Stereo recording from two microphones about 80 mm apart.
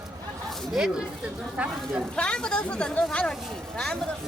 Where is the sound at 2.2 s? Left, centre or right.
Centre.